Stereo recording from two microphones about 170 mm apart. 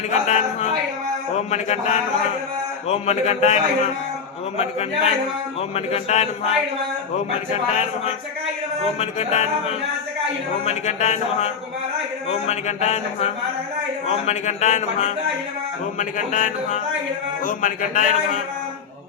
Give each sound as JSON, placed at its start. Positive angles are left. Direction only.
{"t": 0.1, "sound": "a man's voice", "side_deg": 40}
{"t": 7.5, "sound": "a man's voice", "side_deg": 40}